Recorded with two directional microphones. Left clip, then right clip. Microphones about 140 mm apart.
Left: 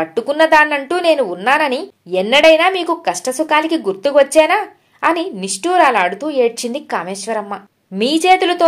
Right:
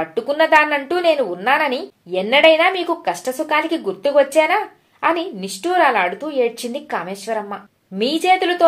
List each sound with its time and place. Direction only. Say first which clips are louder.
0.0 s a woman's voice: left 3 dB; 45° left (ahead or behind)